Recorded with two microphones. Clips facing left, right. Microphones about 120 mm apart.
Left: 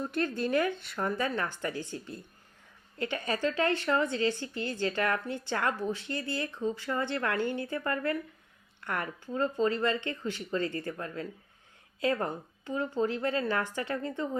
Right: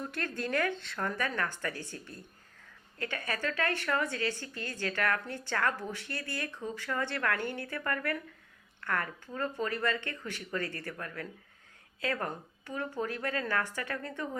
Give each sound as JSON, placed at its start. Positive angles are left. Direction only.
{"t": 0.0, "sound": "a woman's voice", "side_deg": 20}